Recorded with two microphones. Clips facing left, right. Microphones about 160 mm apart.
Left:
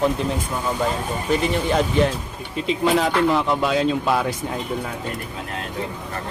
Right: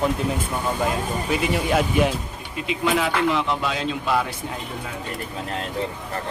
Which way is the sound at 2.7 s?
35° left (ahead or behind).